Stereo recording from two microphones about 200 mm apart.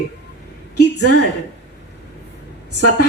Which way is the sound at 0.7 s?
55° left (ahead or behind).